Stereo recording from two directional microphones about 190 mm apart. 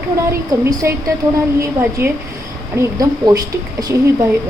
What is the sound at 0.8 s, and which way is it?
A woman's voice, 15° right (ahead or behind).